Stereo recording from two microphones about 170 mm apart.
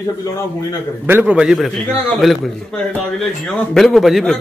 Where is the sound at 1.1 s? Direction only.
10° right (ahead or behind).